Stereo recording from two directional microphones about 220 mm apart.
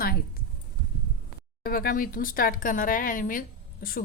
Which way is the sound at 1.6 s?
40° left (ahead or behind).